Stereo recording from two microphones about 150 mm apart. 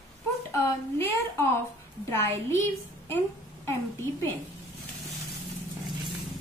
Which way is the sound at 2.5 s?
15° left (ahead or behind).